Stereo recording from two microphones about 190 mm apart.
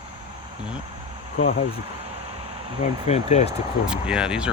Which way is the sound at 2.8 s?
35° left (ahead or behind).